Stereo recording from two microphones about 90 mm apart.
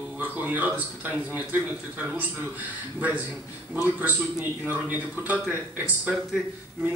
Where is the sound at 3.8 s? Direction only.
20° right (ahead or behind).